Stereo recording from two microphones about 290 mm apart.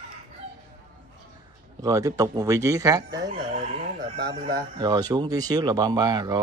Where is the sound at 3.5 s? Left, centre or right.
Right.